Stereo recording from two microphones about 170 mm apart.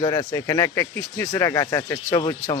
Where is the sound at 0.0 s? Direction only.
30° left (ahead or behind).